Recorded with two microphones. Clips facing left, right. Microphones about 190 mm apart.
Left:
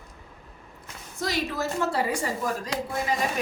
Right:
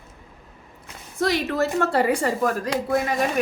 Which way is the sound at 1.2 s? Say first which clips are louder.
Right 6 dB; 60° right (ahead or behind).